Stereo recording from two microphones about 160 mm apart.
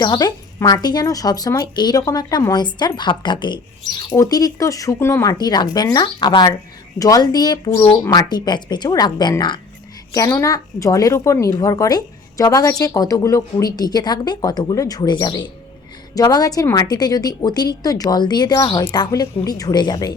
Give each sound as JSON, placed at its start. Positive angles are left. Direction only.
{"t": 0.0, "sound": "speech", "side_deg": 25}